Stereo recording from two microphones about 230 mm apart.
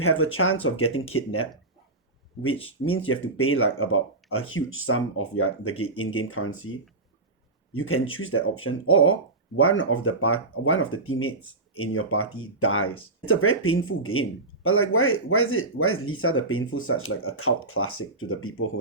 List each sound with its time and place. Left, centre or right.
0.3 s speech: left
2.5 s speech: left
2.9 s speech: left
7.8 s speech: left